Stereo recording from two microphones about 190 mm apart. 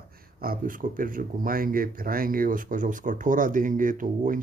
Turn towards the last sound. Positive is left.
turn(degrees=-45)  # may be behind; listen again after turning